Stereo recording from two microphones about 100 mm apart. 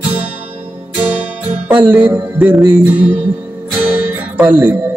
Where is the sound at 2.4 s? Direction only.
5° right (ahead or behind).